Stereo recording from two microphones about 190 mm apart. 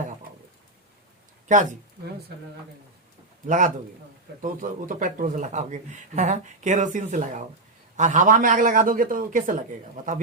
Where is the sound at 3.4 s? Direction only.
40° right (ahead or behind).